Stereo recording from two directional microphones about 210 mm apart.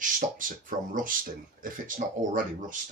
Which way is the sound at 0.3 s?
40° right (ahead or behind).